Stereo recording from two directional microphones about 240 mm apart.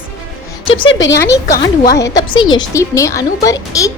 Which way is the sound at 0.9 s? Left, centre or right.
Left.